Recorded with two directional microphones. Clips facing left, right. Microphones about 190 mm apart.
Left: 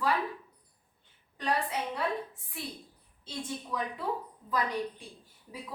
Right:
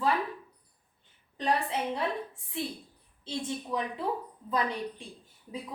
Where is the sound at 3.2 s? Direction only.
25° right (ahead or behind).